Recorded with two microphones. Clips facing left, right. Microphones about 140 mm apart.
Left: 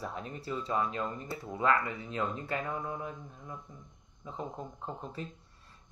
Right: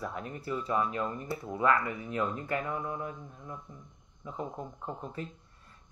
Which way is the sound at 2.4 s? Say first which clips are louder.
Right 2 dB; 25° left (ahead or behind).